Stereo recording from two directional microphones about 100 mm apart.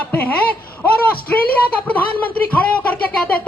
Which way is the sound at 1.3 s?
15° left (ahead or behind).